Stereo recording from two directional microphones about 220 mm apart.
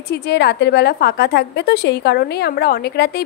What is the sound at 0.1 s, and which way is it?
A woman's voice, 50° left (ahead or behind).